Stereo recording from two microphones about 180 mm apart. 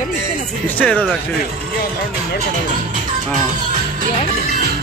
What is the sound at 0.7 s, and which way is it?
Speech, 5° left (ahead or behind).